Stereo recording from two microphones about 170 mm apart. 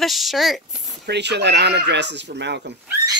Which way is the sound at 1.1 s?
85° right.